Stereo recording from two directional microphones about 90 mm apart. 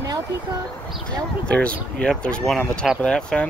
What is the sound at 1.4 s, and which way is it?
Speech, 15° left (ahead or behind).